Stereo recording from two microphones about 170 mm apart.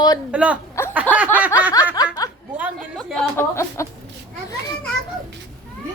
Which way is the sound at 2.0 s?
20° left (ahead or behind).